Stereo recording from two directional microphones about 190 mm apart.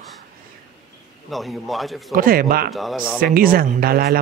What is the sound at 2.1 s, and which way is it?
Speech, 50° right (ahead or behind).